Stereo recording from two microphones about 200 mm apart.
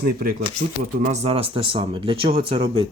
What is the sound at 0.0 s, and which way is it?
Speech, 45° right (ahead or behind).